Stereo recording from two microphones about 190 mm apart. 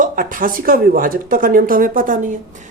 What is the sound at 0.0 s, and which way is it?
Speech, 45° right (ahead or behind).